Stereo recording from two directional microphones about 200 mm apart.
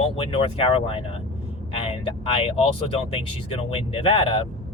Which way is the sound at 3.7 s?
30° left (ahead or behind).